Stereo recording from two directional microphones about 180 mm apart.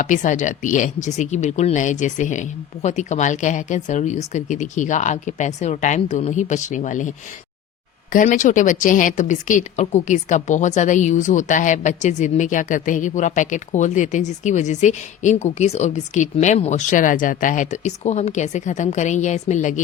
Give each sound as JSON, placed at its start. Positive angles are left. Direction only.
{"t": 0.0, "sound": "a woman's voice", "side_deg": 45}
{"t": 8.1, "sound": "a woman's voice", "side_deg": 45}